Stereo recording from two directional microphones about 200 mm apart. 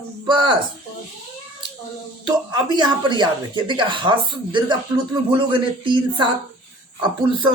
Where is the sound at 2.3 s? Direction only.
20° right (ahead or behind).